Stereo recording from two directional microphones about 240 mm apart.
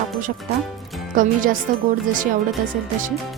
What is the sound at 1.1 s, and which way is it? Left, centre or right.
Speech, right.